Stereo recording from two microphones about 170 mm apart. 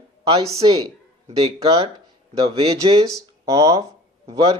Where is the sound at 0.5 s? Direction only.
35° right (ahead or behind).